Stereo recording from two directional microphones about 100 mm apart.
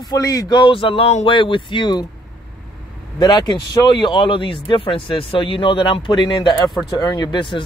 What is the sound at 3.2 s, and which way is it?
Speech, 40° left (ahead or behind).